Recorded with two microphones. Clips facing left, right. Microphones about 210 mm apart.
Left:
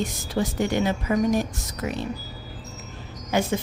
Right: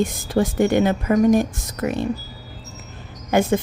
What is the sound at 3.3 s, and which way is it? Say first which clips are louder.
Speech: right 6 dB; 55° right (ahead or behind).